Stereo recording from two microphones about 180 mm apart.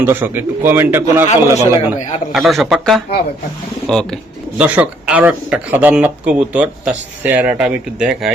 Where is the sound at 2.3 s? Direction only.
Centre (ahead or behind).